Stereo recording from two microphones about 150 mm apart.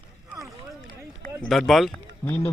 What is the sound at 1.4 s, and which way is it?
Speech, centre (ahead or behind).